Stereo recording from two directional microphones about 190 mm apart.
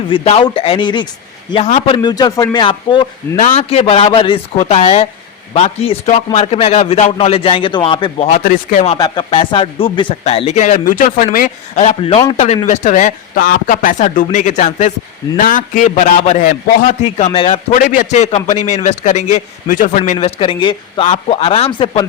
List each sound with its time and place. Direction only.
0.1 s speech: 30° left (ahead or behind)
1.6 s a man's voice: 40° left (ahead or behind)
2.0 s speech: 25° left (ahead or behind)
3.3 s a man's voice: 40° left (ahead or behind)
8.3 s a man's voice: 40° left (ahead or behind)
9.0 s a man's voice: 25° left (ahead or behind)
12.6 s a man's voice: 40° left (ahead or behind)
17.7 s a man's voice: 45° left (ahead or behind); by 22.0 s 25° left (ahead or behind)